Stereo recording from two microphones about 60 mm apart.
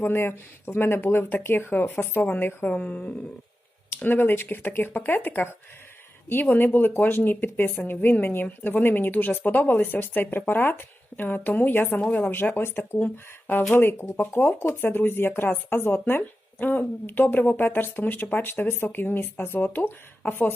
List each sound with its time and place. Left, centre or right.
0.0 s a woman's voice: left
2.8 s a woman's voice: centre
3.8 s speech: left
14.7 s speech: left